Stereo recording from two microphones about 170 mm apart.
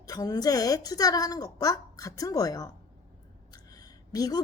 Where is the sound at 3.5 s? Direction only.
20° left (ahead or behind).